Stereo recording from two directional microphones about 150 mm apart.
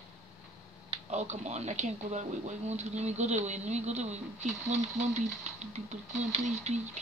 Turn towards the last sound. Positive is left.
turn(degrees=-50)  # may be behind; listen again after turning